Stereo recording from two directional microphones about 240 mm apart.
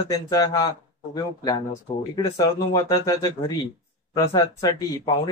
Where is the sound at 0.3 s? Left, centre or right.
Centre.